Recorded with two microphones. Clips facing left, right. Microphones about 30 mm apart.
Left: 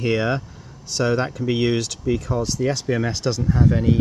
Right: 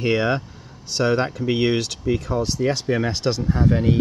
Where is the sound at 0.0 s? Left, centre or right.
Centre.